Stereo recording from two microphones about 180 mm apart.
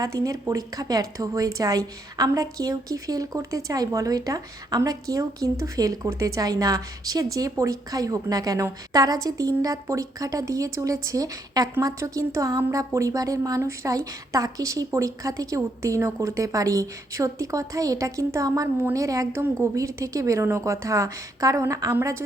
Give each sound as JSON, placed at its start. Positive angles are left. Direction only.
{"t": 0.0, "sound": "a woman's voice", "side_deg": -20}